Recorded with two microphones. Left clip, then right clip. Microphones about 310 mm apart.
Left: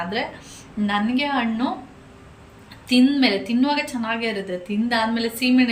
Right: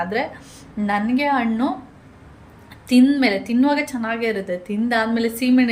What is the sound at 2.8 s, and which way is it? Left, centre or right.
A woman's voice, centre.